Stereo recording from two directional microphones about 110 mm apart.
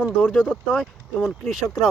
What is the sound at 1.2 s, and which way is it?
Speech, centre (ahead or behind).